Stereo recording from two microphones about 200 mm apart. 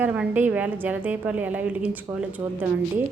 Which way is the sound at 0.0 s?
5° right (ahead or behind).